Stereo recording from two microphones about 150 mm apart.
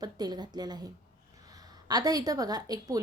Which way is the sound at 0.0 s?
25° right (ahead or behind).